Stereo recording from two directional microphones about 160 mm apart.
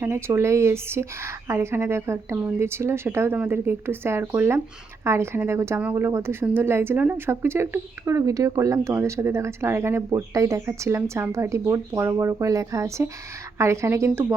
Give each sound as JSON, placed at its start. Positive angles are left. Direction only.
{"t": 0.0, "sound": "a woman's voice", "side_deg": -15}